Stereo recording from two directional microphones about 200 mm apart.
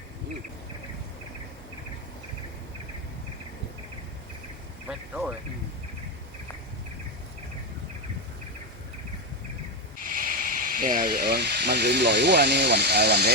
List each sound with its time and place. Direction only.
4.9 s speech: 5° right (ahead or behind)
10.0 s speech: 40° right (ahead or behind)